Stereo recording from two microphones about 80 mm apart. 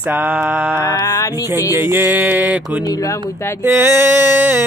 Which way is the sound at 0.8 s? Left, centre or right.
Left.